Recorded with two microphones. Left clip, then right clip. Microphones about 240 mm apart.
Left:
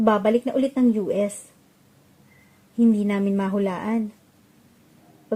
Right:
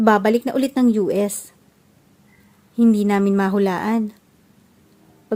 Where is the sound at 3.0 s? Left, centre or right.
Right.